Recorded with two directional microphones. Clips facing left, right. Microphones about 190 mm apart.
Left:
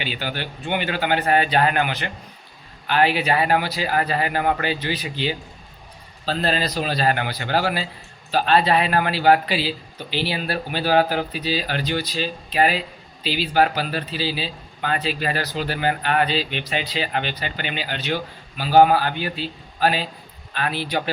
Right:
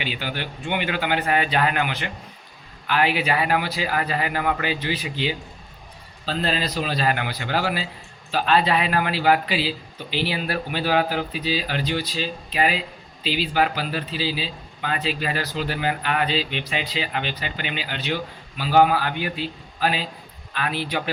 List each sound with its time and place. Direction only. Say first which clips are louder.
0.0 s a man's voice: left 1 dB; 35° left (ahead or behind)
13.5 s a man's voice: left 5 dB; 45° left (ahead or behind)